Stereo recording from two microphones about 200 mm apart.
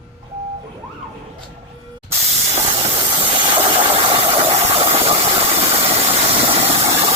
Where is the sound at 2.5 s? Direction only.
30° right (ahead or behind).